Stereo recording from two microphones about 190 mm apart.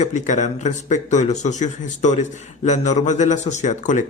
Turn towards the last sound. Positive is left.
turn(degrees=40)  # may be behind; listen again after turning